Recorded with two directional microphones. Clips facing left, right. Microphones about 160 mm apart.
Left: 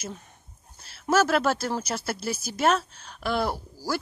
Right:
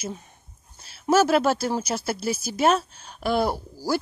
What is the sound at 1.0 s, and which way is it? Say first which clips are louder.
Speech: right 3 dB; 15° right (ahead or behind).